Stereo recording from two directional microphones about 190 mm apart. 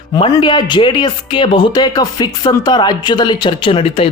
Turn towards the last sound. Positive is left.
turn(degrees=30)  # may be behind; listen again after turning